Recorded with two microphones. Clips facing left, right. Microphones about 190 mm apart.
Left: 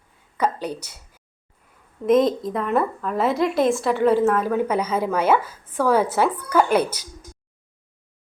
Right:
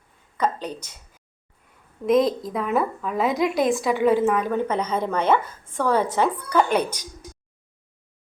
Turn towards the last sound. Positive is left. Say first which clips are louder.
# left 2 dB
turn(degrees=10)  # may be behind; listen again after turning